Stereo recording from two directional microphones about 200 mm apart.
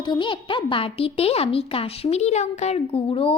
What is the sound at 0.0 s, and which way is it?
A child's voice, 25° left (ahead or behind).